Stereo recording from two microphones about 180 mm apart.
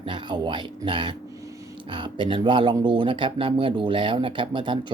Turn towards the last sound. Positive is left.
turn(degrees=-25)  # may be behind; listen again after turning